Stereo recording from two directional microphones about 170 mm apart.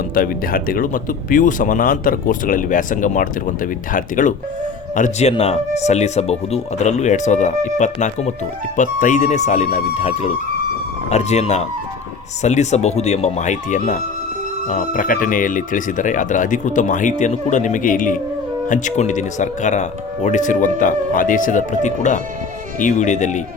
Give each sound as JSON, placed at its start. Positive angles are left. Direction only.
{"t": 0.1, "sound": "speech", "side_deg": 55}
{"t": 5.3, "sound": "speech", "side_deg": 35}